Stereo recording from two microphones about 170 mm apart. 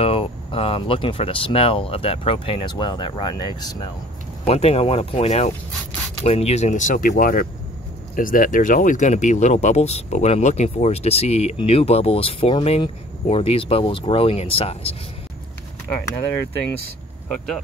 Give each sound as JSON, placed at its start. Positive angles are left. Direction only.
{"t": 0.0, "sound": "speech", "side_deg": 35}
{"t": 4.5, "sound": "speech", "side_deg": 35}